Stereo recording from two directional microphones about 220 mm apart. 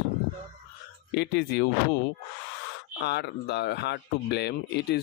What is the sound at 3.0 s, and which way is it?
Speech, 50° left (ahead or behind).